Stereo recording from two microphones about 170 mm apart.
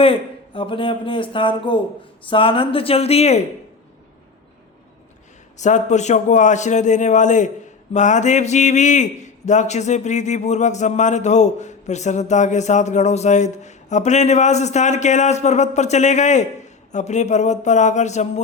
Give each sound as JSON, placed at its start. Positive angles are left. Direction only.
{"t": 0.0, "sound": "a man's voice", "side_deg": 35}
{"t": 5.5, "sound": "a man's voice", "side_deg": 45}